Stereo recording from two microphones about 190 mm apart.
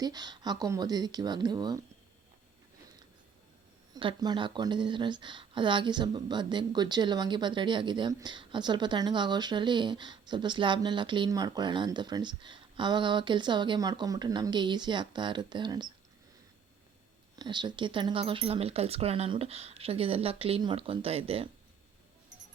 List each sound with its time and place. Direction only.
0.0 s speech: 20° right (ahead or behind)
3.9 s speech: 20° right (ahead or behind)
17.3 s speech: 20° right (ahead or behind)